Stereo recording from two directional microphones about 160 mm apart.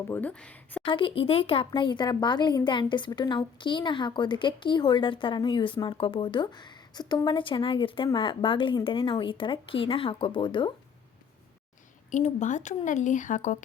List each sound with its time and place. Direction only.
0.1 s speech: 10° left (ahead or behind)
0.9 s speech: 30° left (ahead or behind)
12.1 s a woman's voice: 50° left (ahead or behind)